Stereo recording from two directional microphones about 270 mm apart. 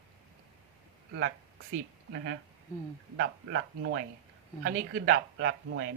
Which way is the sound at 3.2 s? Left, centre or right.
Right.